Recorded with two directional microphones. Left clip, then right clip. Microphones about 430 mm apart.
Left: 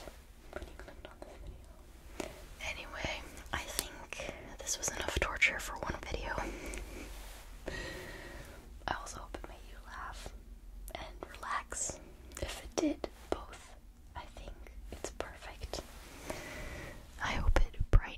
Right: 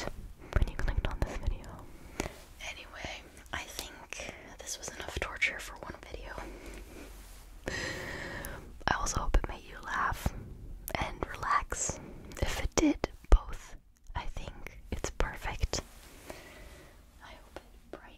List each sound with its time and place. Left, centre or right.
0.5 s whispering: right
2.2 s whispering: right
2.6 s whispering: centre
7.6 s a sound: right
8.8 s whispering: right
16.3 s a sound: centre
17.2 s whispering: left